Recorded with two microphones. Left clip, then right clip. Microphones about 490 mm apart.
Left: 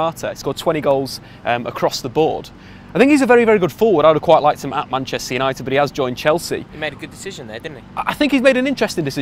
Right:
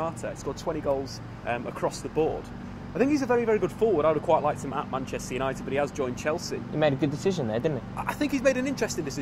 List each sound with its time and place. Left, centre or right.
0.0 s speech: left
2.9 s speech: left
6.8 s speech: right
7.9 s speech: left